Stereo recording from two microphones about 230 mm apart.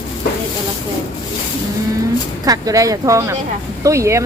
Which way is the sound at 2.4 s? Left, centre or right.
Centre.